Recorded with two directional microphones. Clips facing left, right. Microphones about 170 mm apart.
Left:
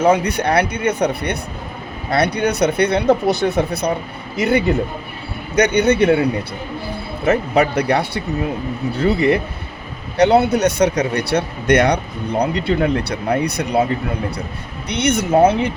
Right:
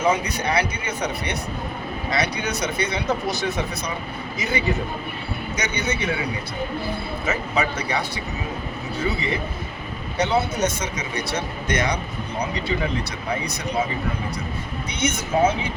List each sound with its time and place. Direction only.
0.0 s speech: 60° left (ahead or behind)
7.3 s speech: 60° left (ahead or behind)
14.8 s speech: 65° left (ahead or behind)